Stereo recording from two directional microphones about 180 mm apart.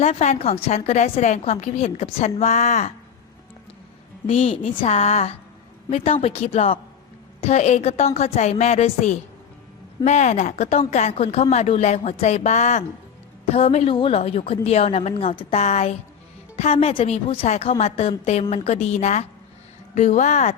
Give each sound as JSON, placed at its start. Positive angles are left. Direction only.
{"t": 0.0, "sound": "a woman's voice", "side_deg": 40}
{"t": 4.3, "sound": "a woman's voice", "side_deg": 35}